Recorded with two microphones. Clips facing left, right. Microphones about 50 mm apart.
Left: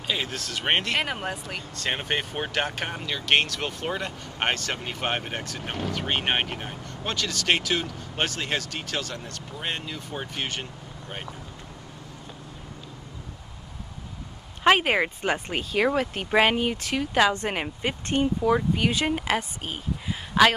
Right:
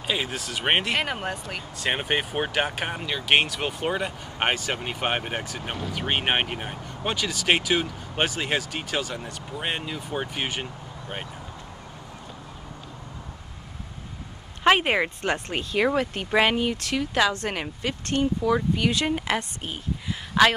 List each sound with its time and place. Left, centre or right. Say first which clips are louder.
0.0 s speech: right 1 dB; centre
1.9 s speech: right 2 dB; centre
14.6 s speech: even; centre
15.2 s a woman's voice: even; centre